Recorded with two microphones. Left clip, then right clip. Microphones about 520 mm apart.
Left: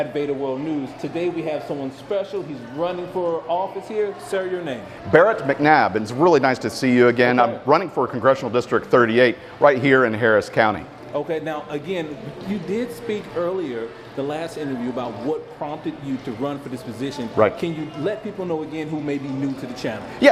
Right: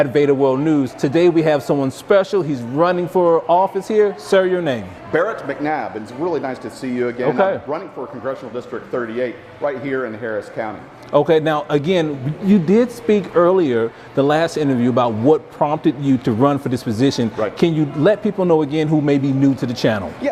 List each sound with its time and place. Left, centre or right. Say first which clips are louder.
0.0 s a man's voice: right 9 dB; right
5.1 s speech: left 4 dB; left
11.1 s a man's voice: right 11 dB; right
20.2 s speech: left 10 dB; left